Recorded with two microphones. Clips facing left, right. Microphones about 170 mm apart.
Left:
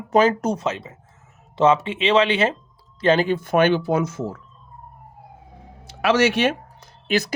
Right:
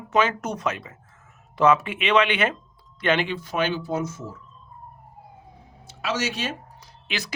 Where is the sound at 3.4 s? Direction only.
55° left (ahead or behind); by 4.4 s 75° left (ahead or behind).